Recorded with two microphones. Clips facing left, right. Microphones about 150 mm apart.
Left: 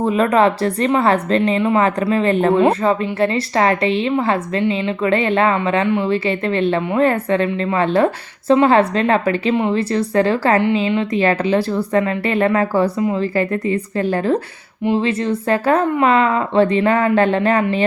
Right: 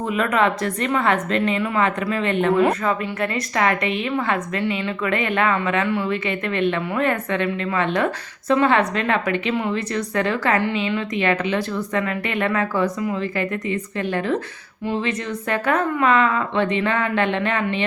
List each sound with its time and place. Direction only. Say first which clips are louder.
0.0 s a woman's voice: left 6 dB; 35° left (ahead or behind)